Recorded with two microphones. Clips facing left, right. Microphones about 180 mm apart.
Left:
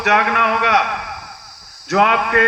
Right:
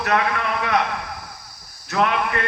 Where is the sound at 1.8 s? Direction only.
80° left.